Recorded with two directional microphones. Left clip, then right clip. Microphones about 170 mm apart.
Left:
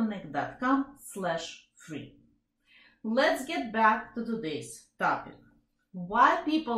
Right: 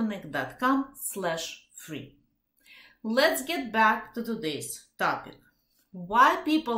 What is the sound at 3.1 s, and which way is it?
A woman's voice, 15° right (ahead or behind).